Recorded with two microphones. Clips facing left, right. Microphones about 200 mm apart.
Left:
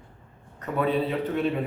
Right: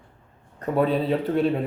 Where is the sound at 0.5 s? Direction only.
35° right (ahead or behind).